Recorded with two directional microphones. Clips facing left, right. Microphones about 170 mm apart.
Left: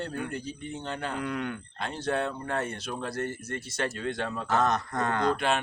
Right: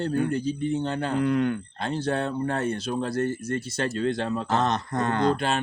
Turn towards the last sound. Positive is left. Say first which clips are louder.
# right 3 dB
turn(degrees=-35)  # may be behind; listen again after turning